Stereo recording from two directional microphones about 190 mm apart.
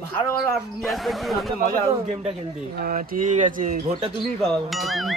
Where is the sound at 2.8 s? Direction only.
45° right (ahead or behind).